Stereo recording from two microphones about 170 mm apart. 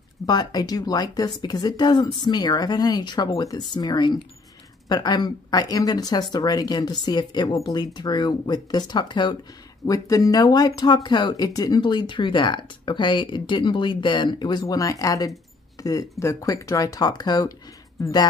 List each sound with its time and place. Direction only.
0.3 s speech: 25° left (ahead or behind)